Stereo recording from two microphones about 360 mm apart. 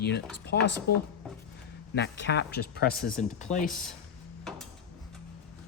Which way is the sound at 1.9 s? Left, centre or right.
Left.